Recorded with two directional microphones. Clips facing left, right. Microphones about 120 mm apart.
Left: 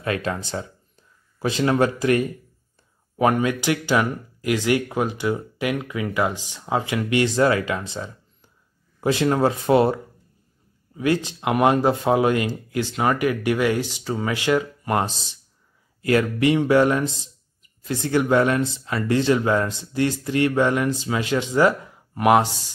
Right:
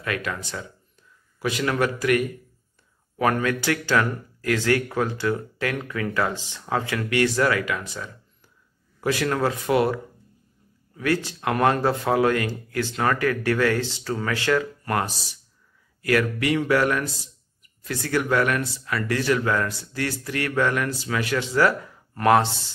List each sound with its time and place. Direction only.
0.0 s speech: 30° left (ahead or behind)
11.0 s speech: 20° left (ahead or behind)